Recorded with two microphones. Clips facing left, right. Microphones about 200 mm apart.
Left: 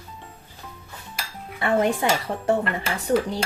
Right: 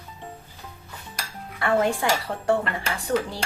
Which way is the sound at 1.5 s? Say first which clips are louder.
Left 1 dB; 20° left (ahead or behind).